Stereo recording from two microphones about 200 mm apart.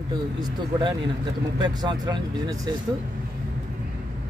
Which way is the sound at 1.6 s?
20° right (ahead or behind).